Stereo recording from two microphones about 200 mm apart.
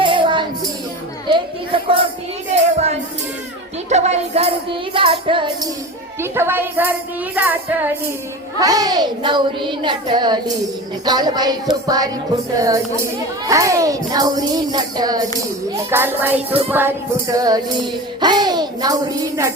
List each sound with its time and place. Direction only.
0.0 s music: 25° right (ahead or behind)
1.3 s a sound: 25° right (ahead or behind)
3.8 s music: 35° right (ahead or behind)
6.1 s music: 10° right (ahead or behind)
8.6 s a child's voice: 20° right (ahead or behind)
12.5 s music: 15° right (ahead or behind)
13.5 s a child's voice: 15° right (ahead or behind)
15.7 s music: 10° right (ahead or behind)
18.2 s a child's voice: 20° right (ahead or behind)